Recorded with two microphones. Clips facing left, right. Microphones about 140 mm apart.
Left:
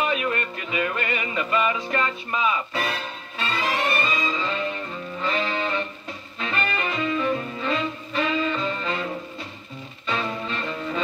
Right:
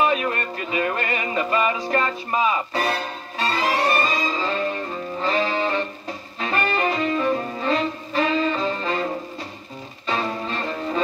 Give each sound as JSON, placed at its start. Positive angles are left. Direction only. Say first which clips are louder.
{"t": 0.0, "sound": "music", "louder": "right 3 dB", "side_deg": -35}